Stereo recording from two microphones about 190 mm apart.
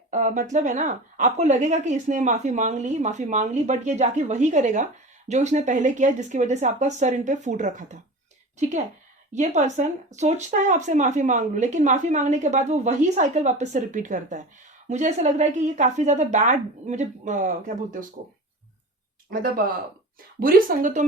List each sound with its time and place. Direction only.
0.1 s speech: 40° right (ahead or behind)
9.3 s speech: 40° right (ahead or behind)
19.3 s speech: 50° right (ahead or behind)